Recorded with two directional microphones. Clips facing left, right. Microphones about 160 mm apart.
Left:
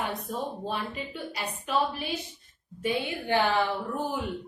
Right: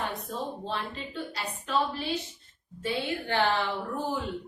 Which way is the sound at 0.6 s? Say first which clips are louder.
Left 2 dB; 10° left (ahead or behind).